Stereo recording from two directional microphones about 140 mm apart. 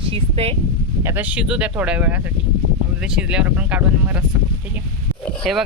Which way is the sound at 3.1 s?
5° right (ahead or behind).